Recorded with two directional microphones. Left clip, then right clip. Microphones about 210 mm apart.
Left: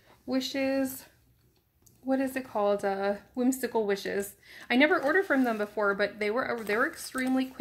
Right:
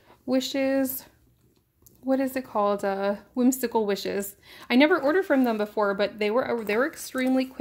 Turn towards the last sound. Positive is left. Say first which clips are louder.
# right 5 dB
turn(degrees=-45)  # may be behind; listen again after turning